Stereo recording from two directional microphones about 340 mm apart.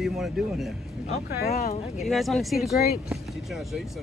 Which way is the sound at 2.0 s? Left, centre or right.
Centre.